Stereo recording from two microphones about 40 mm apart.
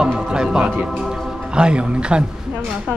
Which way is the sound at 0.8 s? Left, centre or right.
Centre.